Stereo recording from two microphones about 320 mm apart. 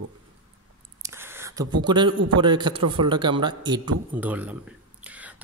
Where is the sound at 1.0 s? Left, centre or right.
Centre.